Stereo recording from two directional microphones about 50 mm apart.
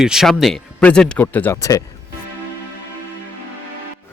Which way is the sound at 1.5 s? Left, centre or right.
Left.